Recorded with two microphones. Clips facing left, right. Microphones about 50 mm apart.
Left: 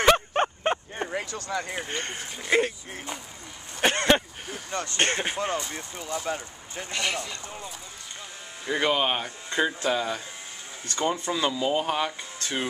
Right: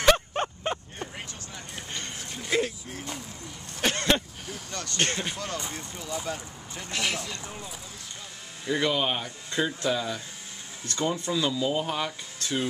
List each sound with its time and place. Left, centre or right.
0.0 s a sound: left
1.0 s a sound: left
1.8 s speech: left
2.1 s speech: centre
2.5 s speech: left
6.9 s speech: centre
8.6 s speech: left